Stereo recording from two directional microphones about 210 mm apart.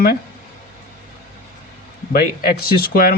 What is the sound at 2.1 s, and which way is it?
Speech, 45° left (ahead or behind).